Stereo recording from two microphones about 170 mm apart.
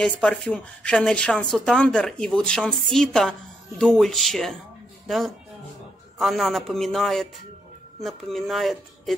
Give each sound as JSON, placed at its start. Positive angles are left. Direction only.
{"t": 0.0, "sound": "speech", "side_deg": 5}